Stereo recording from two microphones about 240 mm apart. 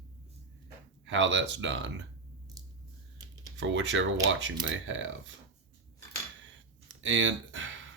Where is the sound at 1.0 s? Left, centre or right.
Right.